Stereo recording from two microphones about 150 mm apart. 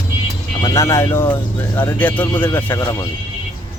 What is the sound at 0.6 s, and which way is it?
Speech, 20° left (ahead or behind).